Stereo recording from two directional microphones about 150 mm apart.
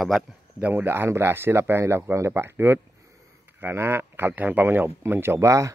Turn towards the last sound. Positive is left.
turn(degrees=-20)  # may be behind; listen again after turning